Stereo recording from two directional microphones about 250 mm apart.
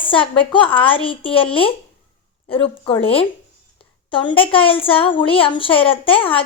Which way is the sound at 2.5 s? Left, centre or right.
Left.